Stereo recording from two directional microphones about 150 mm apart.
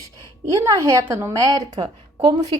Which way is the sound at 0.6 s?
20° right (ahead or behind).